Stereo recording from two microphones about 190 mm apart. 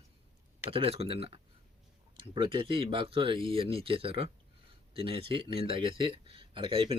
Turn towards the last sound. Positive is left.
turn(degrees=-30)  # may be behind; listen again after turning